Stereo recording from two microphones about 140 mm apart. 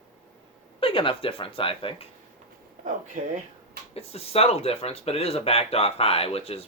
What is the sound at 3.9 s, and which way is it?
Speech, 45° left (ahead or behind).